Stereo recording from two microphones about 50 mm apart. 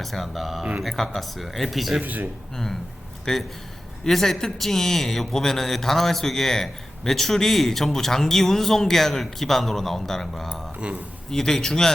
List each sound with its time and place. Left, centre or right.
0.0 s speech: centre
2.0 s speech: right
3.3 s a man's voice: centre